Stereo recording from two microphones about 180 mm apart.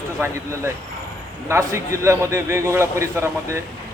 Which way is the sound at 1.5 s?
15° right (ahead or behind).